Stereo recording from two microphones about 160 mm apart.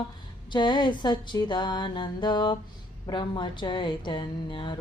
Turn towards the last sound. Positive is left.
turn(degrees=30)  # may be behind; listen again after turning